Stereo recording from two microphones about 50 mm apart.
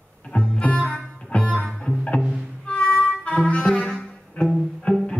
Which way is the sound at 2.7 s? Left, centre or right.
Left.